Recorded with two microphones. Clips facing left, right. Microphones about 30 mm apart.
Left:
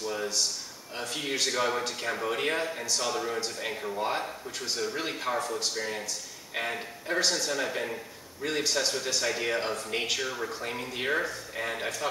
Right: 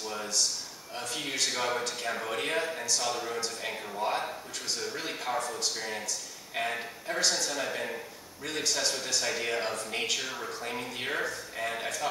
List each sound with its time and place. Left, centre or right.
0.1 s a sound: centre
0.9 s a man's voice: centre
6.5 s a man's voice: centre
8.4 s speech: centre